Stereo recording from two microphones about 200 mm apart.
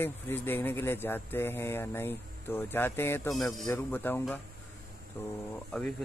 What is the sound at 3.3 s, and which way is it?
Speech, centre (ahead or behind).